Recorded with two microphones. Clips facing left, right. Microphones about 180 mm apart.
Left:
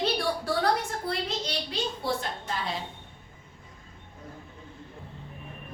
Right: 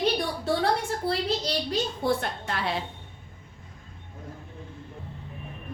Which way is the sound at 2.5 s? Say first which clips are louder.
Right 3 dB; 70° right (ahead or behind).